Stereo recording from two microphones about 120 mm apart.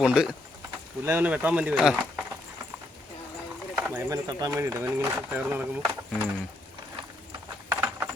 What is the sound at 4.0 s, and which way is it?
Speech, 30° right (ahead or behind).